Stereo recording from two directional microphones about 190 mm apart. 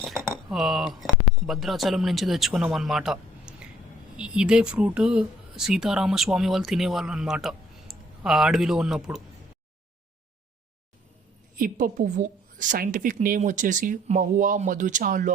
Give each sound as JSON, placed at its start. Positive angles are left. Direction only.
{"t": 0.0, "sound": "cutlery", "side_deg": 0}
{"t": 0.5, "sound": "speech", "side_deg": 0}
{"t": 11.5, "sound": "a woman's voice", "side_deg": -45}